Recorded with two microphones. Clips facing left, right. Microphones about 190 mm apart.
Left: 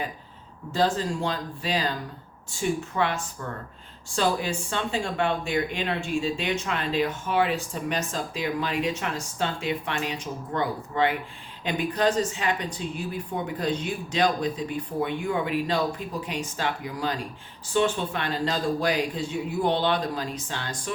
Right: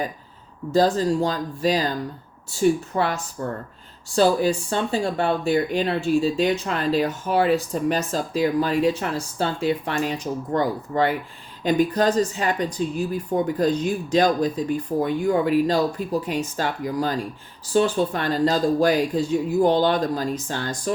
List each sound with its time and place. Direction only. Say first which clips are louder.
0.7 s speech: right 6 dB; 40° right (ahead or behind)